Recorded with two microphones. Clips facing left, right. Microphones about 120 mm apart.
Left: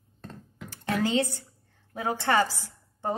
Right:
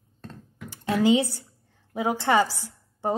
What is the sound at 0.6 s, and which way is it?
A woman's voice, 15° right (ahead or behind).